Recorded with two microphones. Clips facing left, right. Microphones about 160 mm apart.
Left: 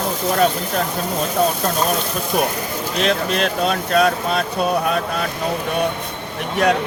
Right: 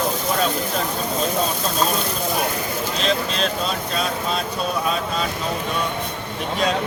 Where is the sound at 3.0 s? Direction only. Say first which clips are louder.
Left 4 dB; 60° left (ahead or behind).